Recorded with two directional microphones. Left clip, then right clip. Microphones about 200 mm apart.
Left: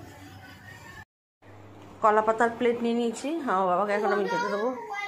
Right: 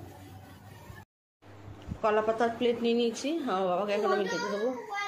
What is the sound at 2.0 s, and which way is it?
A woman's voice, 10° left (ahead or behind).